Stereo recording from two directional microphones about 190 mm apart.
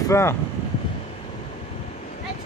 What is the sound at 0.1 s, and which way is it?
Speech, 15° left (ahead or behind).